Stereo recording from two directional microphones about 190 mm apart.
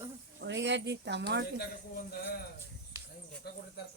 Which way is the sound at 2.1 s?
50° left (ahead or behind).